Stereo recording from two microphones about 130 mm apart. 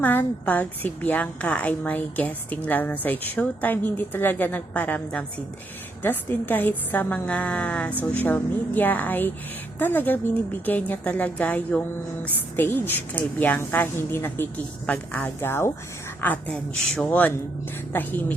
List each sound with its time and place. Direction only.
0.0 s a woman's voice: 15° left (ahead or behind)